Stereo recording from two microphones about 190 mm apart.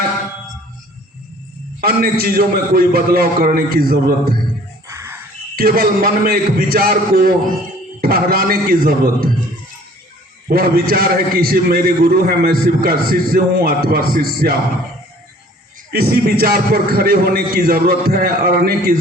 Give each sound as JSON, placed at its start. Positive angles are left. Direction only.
{"t": 1.8, "sound": "a man's voice", "side_deg": -50}
{"t": 5.5, "sound": "a man's voice", "side_deg": -50}
{"t": 10.5, "sound": "a man's voice", "side_deg": -50}
{"t": 15.9, "sound": "a man's voice", "side_deg": -55}